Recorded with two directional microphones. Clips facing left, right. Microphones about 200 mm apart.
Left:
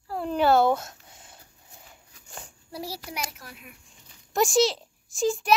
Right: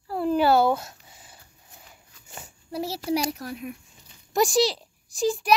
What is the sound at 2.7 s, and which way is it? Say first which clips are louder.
A child's voice: right 10 dB; 25° right (ahead or behind).